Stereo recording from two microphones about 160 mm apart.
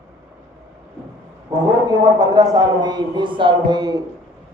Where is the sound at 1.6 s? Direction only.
25° right (ahead or behind).